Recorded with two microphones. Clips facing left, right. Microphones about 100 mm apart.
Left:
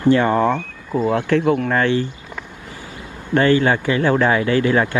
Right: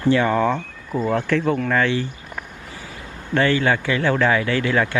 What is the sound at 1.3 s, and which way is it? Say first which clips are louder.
Speech: left 3 dB; 50° left (ahead or behind).